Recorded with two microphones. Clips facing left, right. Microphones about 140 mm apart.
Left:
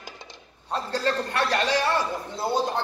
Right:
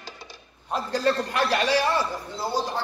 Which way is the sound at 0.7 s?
10° right (ahead or behind).